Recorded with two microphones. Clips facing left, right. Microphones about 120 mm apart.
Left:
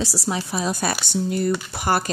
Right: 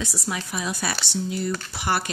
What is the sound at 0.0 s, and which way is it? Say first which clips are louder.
A woman's voice: left 5 dB; 35° left (ahead or behind).